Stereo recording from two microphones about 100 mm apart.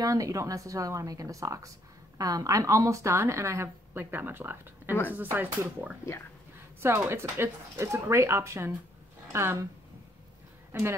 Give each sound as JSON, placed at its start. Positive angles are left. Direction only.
{"t": 0.0, "sound": "a woman's voice", "side_deg": -35}
{"t": 6.8, "sound": "a woman's voice", "side_deg": -25}
{"t": 10.7, "sound": "speech", "side_deg": -25}